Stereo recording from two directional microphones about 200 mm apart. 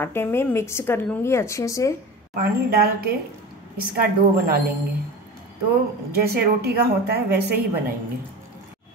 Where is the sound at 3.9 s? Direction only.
50° right (ahead or behind).